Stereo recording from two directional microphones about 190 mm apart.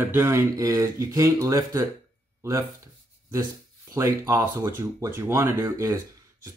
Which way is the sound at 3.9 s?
15° right (ahead or behind).